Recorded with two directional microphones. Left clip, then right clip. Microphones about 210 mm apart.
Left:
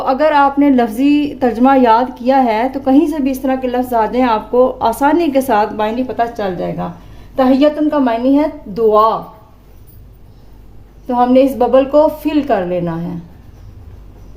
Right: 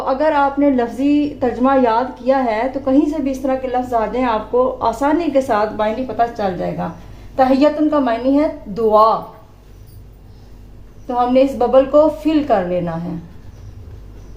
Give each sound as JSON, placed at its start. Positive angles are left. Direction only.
{"t": 0.0, "sound": "a woman's voice", "side_deg": 45}
{"t": 11.0, "sound": "a woman's voice", "side_deg": 40}